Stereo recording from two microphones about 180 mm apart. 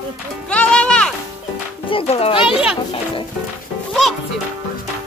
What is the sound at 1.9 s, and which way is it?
Speech, 30° left (ahead or behind).